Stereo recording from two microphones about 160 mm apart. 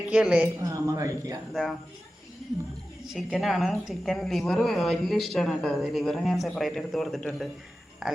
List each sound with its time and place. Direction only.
0.1 s a woman's voice: 5° right (ahead or behind)
0.6 s speech: 20° right (ahead or behind)
3.1 s a woman's voice: centre (ahead or behind)